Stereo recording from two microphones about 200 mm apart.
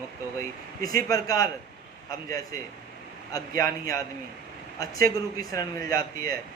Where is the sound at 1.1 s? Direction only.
20° left (ahead or behind).